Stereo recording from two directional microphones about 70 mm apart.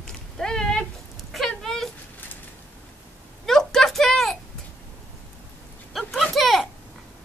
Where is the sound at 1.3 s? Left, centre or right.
Centre.